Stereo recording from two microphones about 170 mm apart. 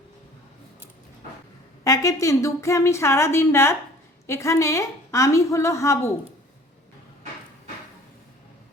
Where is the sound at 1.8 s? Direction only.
20° left (ahead or behind).